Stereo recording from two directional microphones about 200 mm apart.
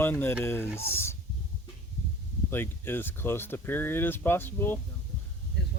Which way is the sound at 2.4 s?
10° left (ahead or behind).